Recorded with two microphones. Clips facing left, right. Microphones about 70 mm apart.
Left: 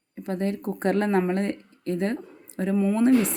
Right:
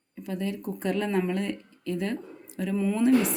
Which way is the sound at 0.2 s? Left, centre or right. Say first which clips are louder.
Left 4 dB; left.